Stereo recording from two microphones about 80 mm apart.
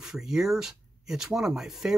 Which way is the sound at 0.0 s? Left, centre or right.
Centre.